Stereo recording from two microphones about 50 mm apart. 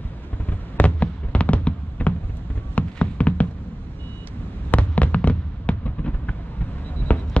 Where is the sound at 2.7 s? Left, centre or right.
Left.